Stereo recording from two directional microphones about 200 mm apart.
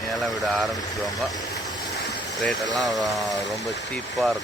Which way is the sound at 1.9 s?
55° left (ahead or behind).